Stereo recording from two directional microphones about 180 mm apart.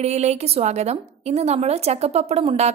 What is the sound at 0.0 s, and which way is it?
A woman's voice, 40° right (ahead or behind).